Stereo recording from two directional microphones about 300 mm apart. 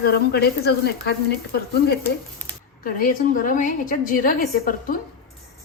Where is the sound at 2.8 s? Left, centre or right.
Left.